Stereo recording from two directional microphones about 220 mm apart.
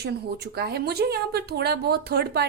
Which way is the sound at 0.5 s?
45° right (ahead or behind).